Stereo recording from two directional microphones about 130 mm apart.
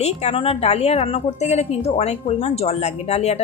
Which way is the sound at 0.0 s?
50° left (ahead or behind).